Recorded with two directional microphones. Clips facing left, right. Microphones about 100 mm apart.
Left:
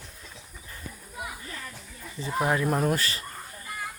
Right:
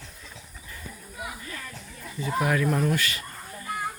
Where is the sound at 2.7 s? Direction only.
40° left (ahead or behind).